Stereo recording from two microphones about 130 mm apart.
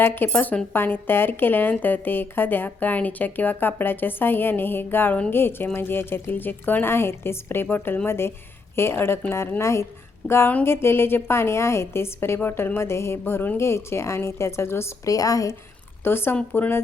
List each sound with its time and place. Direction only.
0.0 s a woman's voice: 15° left (ahead or behind)